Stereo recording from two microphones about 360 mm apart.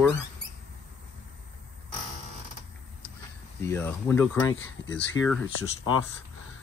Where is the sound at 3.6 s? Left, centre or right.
Centre.